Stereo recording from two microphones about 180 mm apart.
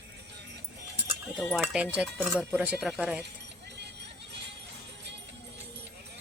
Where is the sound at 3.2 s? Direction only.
70° right (ahead or behind).